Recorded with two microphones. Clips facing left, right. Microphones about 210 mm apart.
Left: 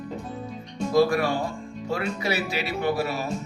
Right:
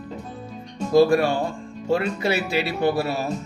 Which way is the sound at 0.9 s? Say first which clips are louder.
Right 4 dB; 30° right (ahead or behind).